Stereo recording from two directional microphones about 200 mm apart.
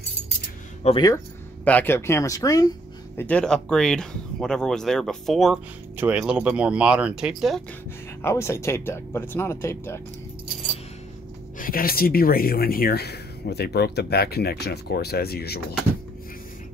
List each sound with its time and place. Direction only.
0.8 s speech: 20° left (ahead or behind)
1.6 s speech: 10° left (ahead or behind)
3.2 s speech: 5° left (ahead or behind)
8.2 s speech: 15° left (ahead or behind)
11.5 s speech: 45° left (ahead or behind)